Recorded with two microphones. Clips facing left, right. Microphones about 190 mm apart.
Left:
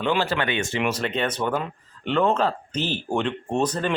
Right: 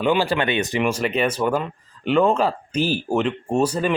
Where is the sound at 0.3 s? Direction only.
20° right (ahead or behind).